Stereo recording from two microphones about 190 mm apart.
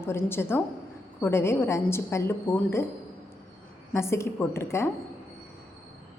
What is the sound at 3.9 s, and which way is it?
A woman's voice, 15° left (ahead or behind).